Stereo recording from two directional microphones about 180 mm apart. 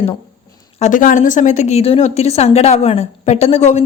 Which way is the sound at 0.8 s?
45° left (ahead or behind).